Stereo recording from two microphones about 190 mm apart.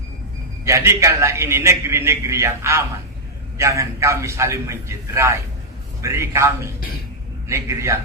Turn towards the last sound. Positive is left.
turn(degrees=-15)  # may be behind; listen again after turning